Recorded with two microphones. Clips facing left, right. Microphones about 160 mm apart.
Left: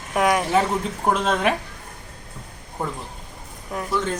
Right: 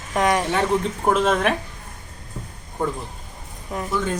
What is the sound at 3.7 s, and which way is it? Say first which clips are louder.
Speech: right 1 dB; centre (ahead or behind).